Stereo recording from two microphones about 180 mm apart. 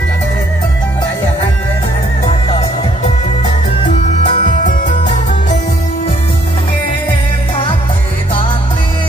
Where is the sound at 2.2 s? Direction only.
35° left (ahead or behind).